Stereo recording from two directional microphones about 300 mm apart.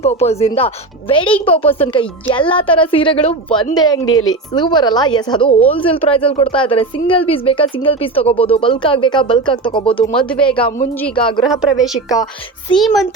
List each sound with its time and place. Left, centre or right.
0.0 s speech: left
3.9 s a woman's voice: left
4.3 s speech: centre
10.2 s a woman's voice: centre
10.4 s speech: centre
11.4 s a woman's voice: centre